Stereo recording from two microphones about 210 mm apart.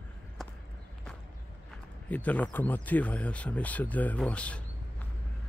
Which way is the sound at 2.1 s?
5° left (ahead or behind).